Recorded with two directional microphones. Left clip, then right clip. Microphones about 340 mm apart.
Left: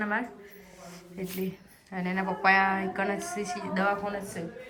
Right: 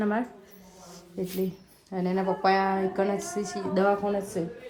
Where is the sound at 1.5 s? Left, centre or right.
Centre.